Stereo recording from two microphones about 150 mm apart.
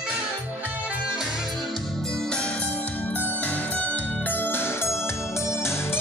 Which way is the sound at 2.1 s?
5° left (ahead or behind).